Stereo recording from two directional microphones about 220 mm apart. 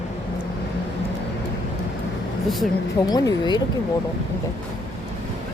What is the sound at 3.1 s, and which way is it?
Speech, 15° left (ahead or behind).